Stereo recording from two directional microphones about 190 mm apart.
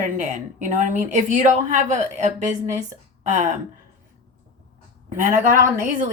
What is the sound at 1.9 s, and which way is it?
A woman's voice, 40° right (ahead or behind).